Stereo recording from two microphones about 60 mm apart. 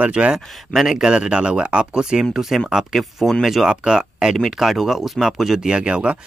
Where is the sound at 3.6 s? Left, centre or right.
Centre.